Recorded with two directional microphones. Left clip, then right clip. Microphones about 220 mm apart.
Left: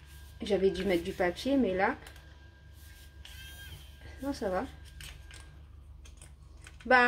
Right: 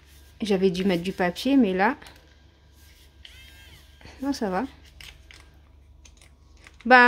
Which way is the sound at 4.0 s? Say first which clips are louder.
Right 6 dB; 45° right (ahead or behind).